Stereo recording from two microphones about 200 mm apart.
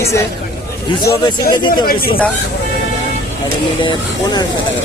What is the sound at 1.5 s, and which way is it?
Speech, 25° left (ahead or behind).